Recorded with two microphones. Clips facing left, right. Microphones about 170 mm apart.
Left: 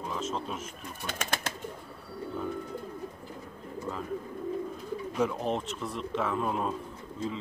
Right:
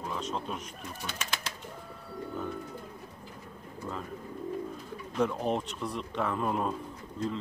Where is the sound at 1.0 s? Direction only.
50° left (ahead or behind).